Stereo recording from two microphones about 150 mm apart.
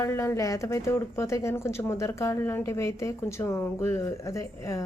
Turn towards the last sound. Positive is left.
turn(degrees=20)  # may be behind; listen again after turning